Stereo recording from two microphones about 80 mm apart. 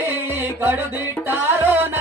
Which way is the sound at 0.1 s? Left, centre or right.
Right.